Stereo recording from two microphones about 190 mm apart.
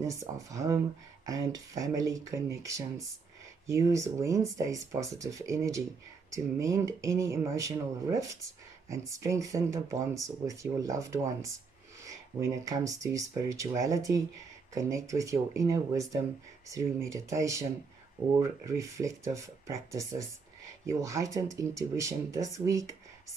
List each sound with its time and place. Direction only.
0.0 s speech: 15° right (ahead or behind)